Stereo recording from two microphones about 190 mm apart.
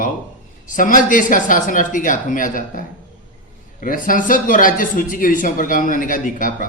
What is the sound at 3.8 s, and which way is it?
A man's voice, 45° left (ahead or behind).